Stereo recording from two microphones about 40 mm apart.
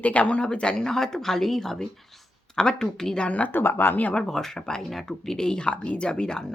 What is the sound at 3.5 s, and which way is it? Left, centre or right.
Speech, left.